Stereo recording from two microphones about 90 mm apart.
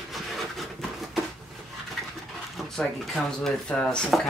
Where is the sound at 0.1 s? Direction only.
Centre (ahead or behind).